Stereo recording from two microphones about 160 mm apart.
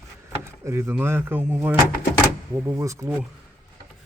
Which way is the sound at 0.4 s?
15° right (ahead or behind).